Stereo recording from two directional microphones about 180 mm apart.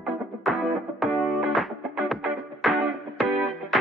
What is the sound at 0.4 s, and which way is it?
Music, centre (ahead or behind).